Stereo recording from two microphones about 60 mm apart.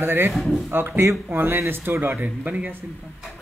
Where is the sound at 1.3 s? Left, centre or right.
Right.